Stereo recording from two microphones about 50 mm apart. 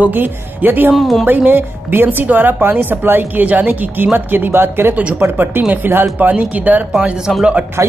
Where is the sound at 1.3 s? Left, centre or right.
Right.